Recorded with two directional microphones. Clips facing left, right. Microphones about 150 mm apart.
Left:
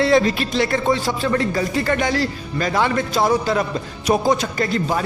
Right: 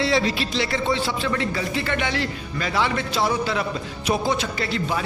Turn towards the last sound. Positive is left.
turn(degrees=45)  # may be behind; listen again after turning